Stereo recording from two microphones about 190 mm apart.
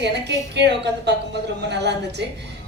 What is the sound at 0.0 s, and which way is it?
A woman's voice, 65° right (ahead or behind).